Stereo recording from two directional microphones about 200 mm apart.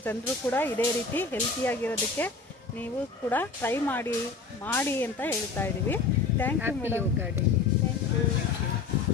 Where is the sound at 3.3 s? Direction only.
10° left (ahead or behind).